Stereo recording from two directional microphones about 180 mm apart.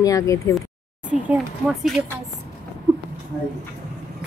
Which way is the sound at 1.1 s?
5° right (ahead or behind).